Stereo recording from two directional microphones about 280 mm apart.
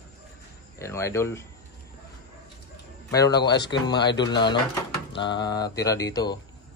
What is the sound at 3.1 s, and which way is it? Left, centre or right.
Mantra, centre.